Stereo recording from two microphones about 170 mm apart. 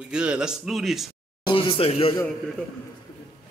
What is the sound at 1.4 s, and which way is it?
Speech, 30° left (ahead or behind).